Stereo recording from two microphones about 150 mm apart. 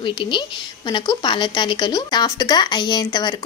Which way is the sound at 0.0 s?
35° left (ahead or behind).